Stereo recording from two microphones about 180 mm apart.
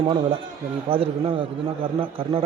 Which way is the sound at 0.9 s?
30° right (ahead or behind).